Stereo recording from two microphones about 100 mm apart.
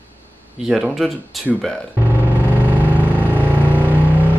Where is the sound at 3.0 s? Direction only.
20° right (ahead or behind).